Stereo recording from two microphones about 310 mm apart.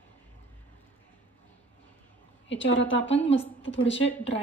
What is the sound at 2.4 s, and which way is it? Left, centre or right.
Speech, left.